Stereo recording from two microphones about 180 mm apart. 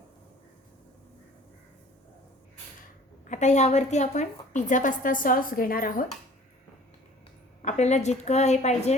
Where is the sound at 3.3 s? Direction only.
40° left (ahead or behind).